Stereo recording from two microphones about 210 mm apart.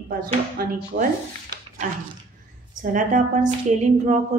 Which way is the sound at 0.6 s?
45° right (ahead or behind).